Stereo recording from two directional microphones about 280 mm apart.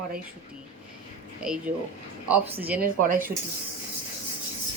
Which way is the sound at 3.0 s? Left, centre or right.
Right.